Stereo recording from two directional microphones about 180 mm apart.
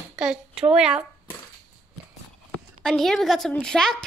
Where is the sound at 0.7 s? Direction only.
5° right (ahead or behind).